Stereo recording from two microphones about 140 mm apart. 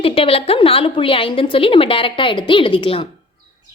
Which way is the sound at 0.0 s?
40° left (ahead or behind).